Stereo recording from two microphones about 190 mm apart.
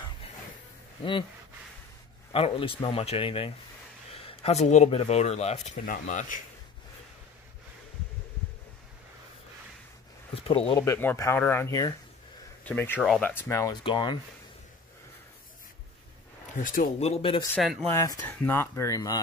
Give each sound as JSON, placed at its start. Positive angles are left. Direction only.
{"t": 2.3, "sound": "speech", "side_deg": 30}
{"t": 10.3, "sound": "speech", "side_deg": 30}
{"t": 10.8, "sound": "speech", "side_deg": 10}
{"t": 16.5, "sound": "speech", "side_deg": 45}
{"t": 17.1, "sound": "speech", "side_deg": 30}
{"t": 17.6, "sound": "speech", "side_deg": 0}
{"t": 17.9, "sound": "speech", "side_deg": 15}